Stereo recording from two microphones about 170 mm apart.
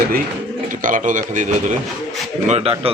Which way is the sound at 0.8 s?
50° right (ahead or behind).